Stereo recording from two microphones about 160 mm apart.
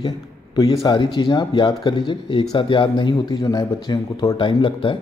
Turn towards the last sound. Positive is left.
turn(degrees=30)  # may be behind; listen again after turning